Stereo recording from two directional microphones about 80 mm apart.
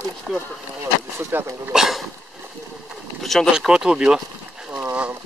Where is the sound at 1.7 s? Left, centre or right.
Centre.